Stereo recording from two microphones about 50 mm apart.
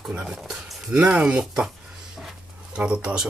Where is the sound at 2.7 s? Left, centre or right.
Centre.